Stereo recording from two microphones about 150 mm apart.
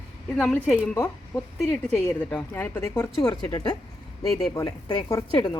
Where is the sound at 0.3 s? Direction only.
5° left (ahead or behind).